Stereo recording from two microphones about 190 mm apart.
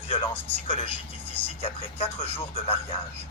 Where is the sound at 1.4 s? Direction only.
35° left (ahead or behind).